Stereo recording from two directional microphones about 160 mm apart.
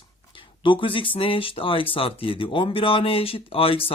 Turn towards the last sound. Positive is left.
turn(degrees=35)  # may be behind; listen again after turning